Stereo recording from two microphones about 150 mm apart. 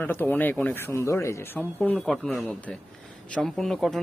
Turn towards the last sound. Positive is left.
turn(degrees=0)  # may be behind; listen again after turning